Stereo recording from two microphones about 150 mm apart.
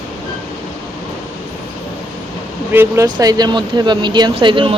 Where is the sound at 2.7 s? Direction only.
20° right (ahead or behind).